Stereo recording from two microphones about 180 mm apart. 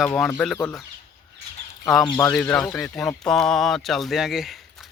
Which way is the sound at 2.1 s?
15° left (ahead or behind).